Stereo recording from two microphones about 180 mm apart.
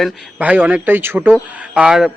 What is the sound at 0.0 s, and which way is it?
Speech, 10° right (ahead or behind).